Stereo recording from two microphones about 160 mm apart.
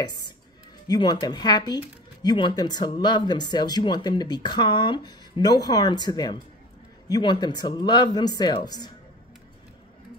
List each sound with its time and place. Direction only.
0.8 s speech: 25° left (ahead or behind)